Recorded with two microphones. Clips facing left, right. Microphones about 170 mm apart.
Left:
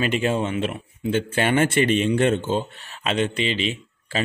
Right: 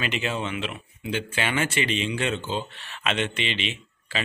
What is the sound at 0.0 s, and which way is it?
Speech, 45° left (ahead or behind).